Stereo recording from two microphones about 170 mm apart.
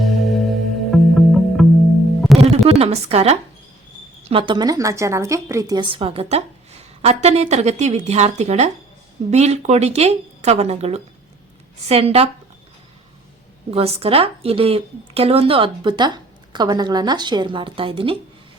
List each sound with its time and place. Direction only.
0.0 s music: centre (ahead or behind)
2.4 s a sound: 35° right (ahead or behind)
4.2 s a woman's voice: 35° right (ahead or behind)
13.7 s a woman's voice: 35° right (ahead or behind)